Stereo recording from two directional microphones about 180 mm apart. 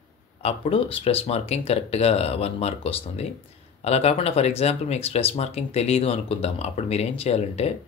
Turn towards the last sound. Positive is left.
turn(degrees=35)  # may be behind; listen again after turning